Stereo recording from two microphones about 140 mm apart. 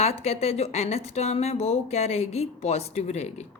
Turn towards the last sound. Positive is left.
turn(degrees=50)  # may be behind; listen again after turning